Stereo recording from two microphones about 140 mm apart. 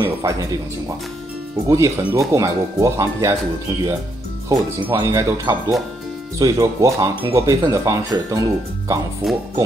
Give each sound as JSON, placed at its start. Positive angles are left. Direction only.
{"t": 0.0, "sound": "speech", "side_deg": -25}
{"t": 1.7, "sound": "speech", "side_deg": -20}
{"t": 4.8, "sound": "speech", "side_deg": -20}
{"t": 9.2, "sound": "speech", "side_deg": 0}